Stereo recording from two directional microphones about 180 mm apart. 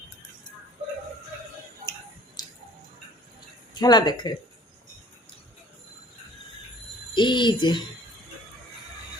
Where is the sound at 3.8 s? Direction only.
25° left (ahead or behind).